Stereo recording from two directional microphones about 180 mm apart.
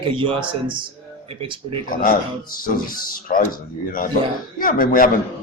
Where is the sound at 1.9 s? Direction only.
50° left (ahead or behind).